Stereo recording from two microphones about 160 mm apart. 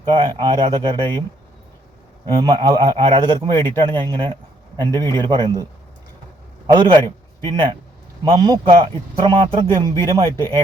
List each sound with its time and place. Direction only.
0.1 s a man's voice: 25° right (ahead or behind)
2.2 s a man's voice: 25° right (ahead or behind)
6.7 s a man's voice: 30° right (ahead or behind)